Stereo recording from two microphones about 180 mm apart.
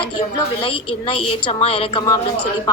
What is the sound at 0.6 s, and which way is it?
A woman's voice, 30° left (ahead or behind).